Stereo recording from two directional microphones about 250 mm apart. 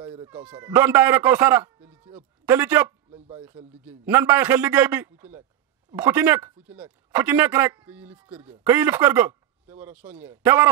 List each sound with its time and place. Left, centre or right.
0.3 s speech: centre
3.1 s a sound: right
3.3 s speech: centre